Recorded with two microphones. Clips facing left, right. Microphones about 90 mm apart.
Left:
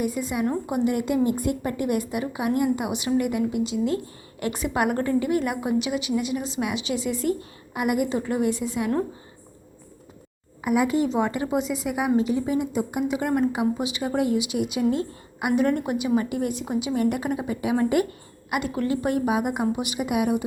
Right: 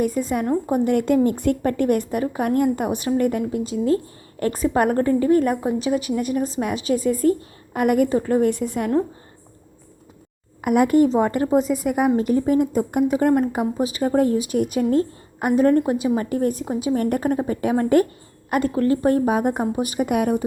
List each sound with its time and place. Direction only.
0.0 s a woman's voice: 45° right (ahead or behind)
2.0 s a woman's voice: 40° right (ahead or behind)
10.6 s a woman's voice: 55° right (ahead or behind)